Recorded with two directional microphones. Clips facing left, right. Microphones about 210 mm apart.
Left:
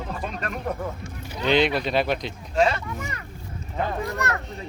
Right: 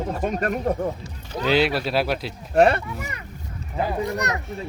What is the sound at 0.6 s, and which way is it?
Speech, 30° right (ahead or behind).